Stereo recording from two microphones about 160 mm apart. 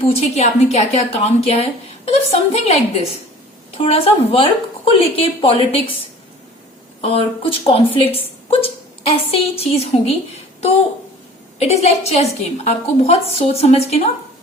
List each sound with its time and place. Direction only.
0.0 s a woman's voice: 40° left (ahead or behind)
7.0 s a woman's voice: 35° left (ahead or behind)
11.6 s a woman's voice: 40° left (ahead or behind)